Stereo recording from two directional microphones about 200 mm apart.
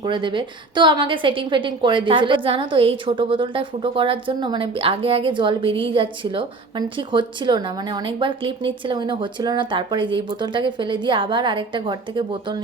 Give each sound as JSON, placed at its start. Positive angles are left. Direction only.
{"t": 0.0, "sound": "a woman's voice", "side_deg": -25}